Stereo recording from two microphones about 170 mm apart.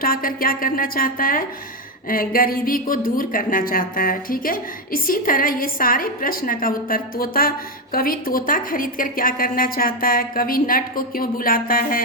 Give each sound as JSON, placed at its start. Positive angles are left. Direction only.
{"t": 0.0, "sound": "a woman's voice", "side_deg": 55}